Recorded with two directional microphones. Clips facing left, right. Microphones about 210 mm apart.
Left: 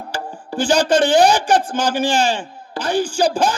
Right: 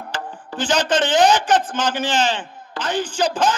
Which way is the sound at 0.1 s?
10° left (ahead or behind).